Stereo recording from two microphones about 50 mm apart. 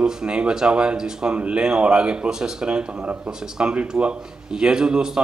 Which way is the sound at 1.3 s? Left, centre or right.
Right.